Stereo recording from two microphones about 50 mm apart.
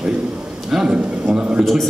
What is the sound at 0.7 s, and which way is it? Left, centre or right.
Speech, centre.